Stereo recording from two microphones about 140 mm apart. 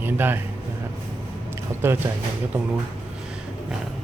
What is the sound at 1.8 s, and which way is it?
Speech, 15° right (ahead or behind).